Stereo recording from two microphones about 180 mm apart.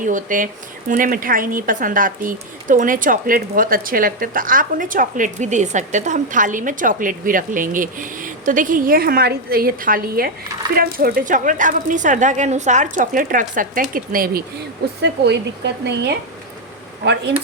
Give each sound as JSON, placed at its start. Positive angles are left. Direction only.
{"t": 0.0, "sound": "a woman's voice", "side_deg": -45}
{"t": 15.0, "sound": "speech", "side_deg": -70}